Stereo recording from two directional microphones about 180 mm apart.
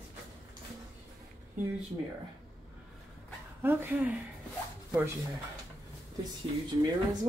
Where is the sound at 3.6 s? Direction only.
10° right (ahead or behind).